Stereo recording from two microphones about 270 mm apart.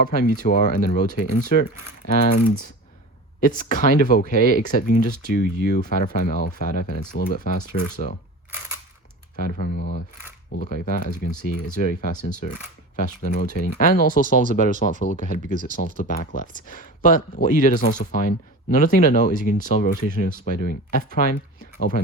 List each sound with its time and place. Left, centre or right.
0.0 s speech: left
9.3 s speech: left